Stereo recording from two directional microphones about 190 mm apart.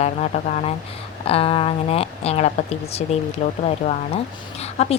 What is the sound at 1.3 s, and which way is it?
Speech, 30° left (ahead or behind).